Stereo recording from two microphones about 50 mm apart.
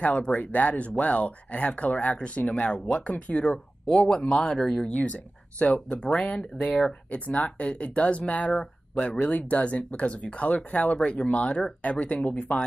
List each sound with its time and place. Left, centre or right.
0.0 s speech: left
5.0 s speech: left
9.2 s speech: left